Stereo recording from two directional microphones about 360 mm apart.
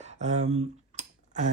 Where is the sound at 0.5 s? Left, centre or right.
Centre.